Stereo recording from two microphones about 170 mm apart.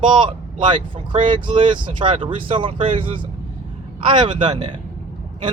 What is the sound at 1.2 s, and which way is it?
Speech, 30° right (ahead or behind).